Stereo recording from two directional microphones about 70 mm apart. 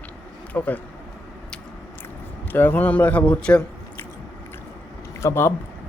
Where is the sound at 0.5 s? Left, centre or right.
Left.